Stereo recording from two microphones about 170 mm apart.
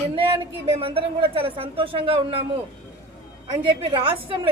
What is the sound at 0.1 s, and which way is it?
A woman's voice, 35° right (ahead or behind).